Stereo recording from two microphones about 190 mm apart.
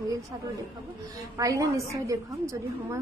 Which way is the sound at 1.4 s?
15° right (ahead or behind).